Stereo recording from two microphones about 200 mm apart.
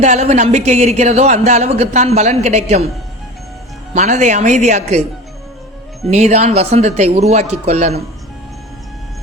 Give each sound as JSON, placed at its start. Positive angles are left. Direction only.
{"t": 0.0, "sound": "speech", "side_deg": -35}
{"t": 3.9, "sound": "speech", "side_deg": -35}
{"t": 6.1, "sound": "speech", "side_deg": -35}